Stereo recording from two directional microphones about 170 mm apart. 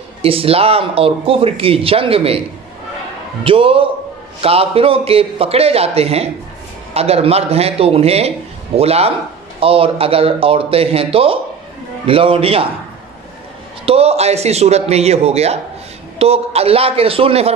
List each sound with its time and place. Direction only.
0.2 s speech: 35° right (ahead or behind)
3.4 s speech: 30° right (ahead or behind)
13.8 s speech: 35° right (ahead or behind)